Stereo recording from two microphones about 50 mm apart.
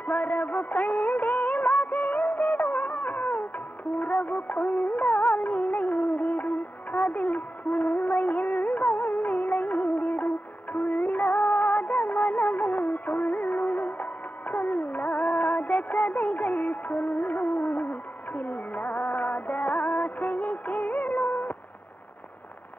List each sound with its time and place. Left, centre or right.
0.0 s music of bollywood: left